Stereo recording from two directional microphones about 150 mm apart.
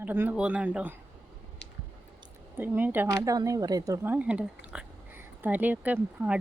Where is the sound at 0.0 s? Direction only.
10° right (ahead or behind).